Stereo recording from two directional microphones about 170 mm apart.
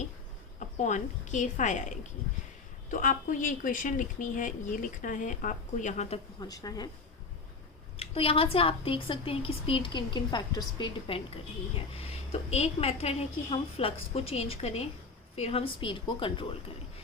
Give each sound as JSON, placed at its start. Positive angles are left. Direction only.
{"t": 0.8, "sound": "speech", "side_deg": 45}
{"t": 6.4, "sound": "a woman's voice", "side_deg": 20}
{"t": 7.9, "sound": "a woman's voice", "side_deg": 35}